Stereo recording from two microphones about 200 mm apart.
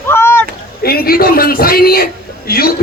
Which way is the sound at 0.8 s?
50° left (ahead or behind).